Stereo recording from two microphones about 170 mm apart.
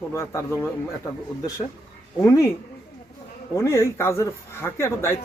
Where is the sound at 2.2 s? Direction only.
20° left (ahead or behind).